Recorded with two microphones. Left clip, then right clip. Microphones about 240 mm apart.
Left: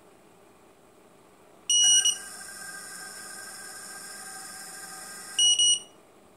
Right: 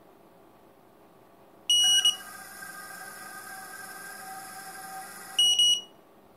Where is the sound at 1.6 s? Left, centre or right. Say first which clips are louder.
Even; centre.